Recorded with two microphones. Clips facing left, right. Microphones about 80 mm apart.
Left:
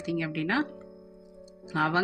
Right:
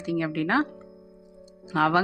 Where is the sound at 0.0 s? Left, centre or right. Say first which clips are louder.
Right 4 dB; right.